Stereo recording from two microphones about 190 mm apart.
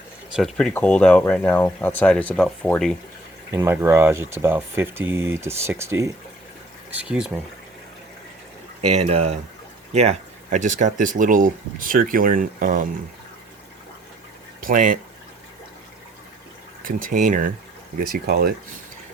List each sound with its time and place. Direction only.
0.3 s speech: centre (ahead or behind)
3.5 s speech: 15° right (ahead or behind)
9.0 s speech: 35° right (ahead or behind)
14.6 s speech: 45° right (ahead or behind)
16.8 s speech: 45° right (ahead or behind)
18.0 s speech: 55° right (ahead or behind)